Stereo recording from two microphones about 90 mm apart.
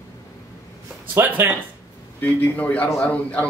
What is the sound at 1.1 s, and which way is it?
Speech, 25° right (ahead or behind).